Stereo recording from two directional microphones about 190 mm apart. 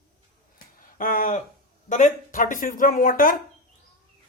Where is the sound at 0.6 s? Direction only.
45° left (ahead or behind).